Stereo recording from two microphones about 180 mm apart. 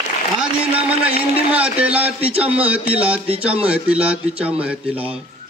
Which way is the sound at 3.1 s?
5° right (ahead or behind).